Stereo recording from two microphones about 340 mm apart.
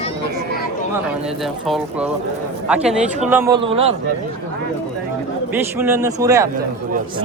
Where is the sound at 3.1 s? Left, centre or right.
Right.